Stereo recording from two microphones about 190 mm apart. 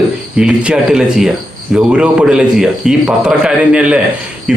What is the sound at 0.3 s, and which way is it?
A man's voice, 5° right (ahead or behind).